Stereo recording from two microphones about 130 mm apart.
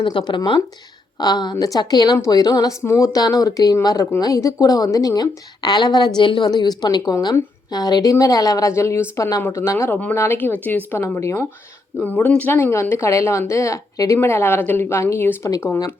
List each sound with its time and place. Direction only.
0.0 s a woman's voice: 40° left (ahead or behind); by 15.7 s 20° left (ahead or behind)